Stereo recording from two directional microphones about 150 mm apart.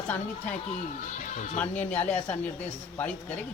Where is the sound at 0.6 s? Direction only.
55° left (ahead or behind).